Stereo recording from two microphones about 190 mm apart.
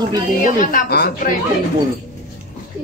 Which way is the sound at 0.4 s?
45° left (ahead or behind).